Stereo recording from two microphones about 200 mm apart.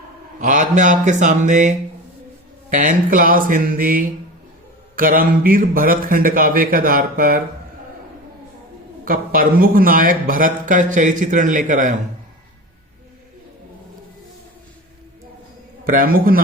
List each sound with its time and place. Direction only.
0.3 s a man's voice: 40° right (ahead or behind)
9.0 s a man's voice: 45° right (ahead or behind)
15.8 s a man's voice: 45° right (ahead or behind)